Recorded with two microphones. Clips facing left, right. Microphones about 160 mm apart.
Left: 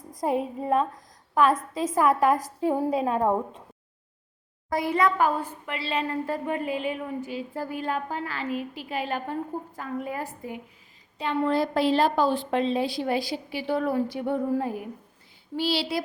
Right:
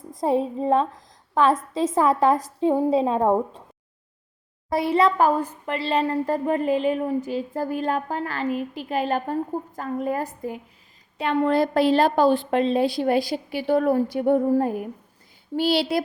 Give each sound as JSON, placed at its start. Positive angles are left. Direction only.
{"t": 0.1, "sound": "a woman's voice", "side_deg": -25}
{"t": 4.7, "sound": "a woman's voice", "side_deg": -25}
{"t": 11.2, "sound": "a woman's voice", "side_deg": -60}